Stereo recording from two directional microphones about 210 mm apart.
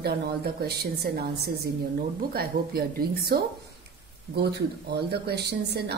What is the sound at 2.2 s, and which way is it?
A woman's voice, 45° right (ahead or behind).